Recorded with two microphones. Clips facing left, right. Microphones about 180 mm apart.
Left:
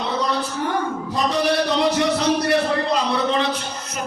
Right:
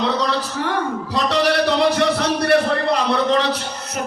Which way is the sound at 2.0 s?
65° right (ahead or behind).